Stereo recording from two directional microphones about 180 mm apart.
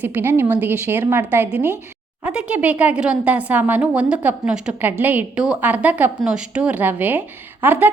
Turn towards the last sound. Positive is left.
turn(degrees=-10)  # may be behind; listen again after turning